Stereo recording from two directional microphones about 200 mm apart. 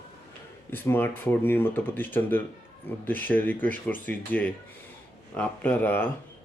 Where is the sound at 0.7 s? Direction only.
10° left (ahead or behind).